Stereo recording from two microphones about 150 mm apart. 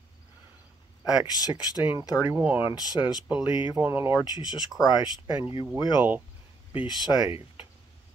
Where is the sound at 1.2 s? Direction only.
25° left (ahead or behind).